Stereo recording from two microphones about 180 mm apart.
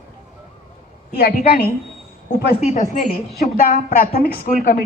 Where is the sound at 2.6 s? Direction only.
35° left (ahead or behind); by 4.8 s 55° left (ahead or behind).